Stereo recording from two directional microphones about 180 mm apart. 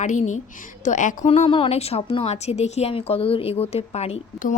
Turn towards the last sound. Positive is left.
turn(degrees=40)  # may be behind; listen again after turning